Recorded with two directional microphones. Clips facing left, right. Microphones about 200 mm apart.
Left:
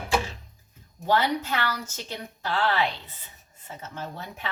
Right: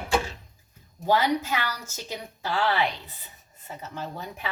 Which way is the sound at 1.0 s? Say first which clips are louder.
Right 1 dB; 10° right (ahead or behind).